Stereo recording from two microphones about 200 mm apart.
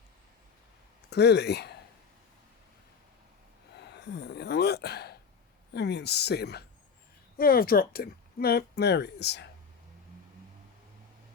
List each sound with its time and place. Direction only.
1.1 s speech: 55° left (ahead or behind)
3.8 s speech: 60° left (ahead or behind)